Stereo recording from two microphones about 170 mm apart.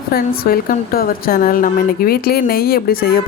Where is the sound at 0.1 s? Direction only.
60° left (ahead or behind).